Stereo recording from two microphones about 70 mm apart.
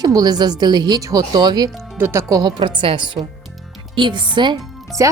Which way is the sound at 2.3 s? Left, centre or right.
Right.